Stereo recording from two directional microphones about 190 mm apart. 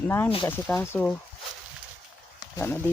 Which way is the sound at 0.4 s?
10° left (ahead or behind).